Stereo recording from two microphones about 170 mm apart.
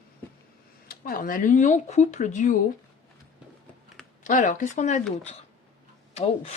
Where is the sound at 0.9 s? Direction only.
55° left (ahead or behind).